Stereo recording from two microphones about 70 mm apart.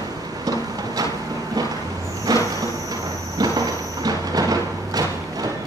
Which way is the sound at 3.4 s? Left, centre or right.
Right.